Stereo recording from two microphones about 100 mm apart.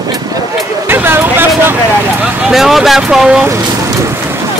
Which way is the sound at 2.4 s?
5° right (ahead or behind).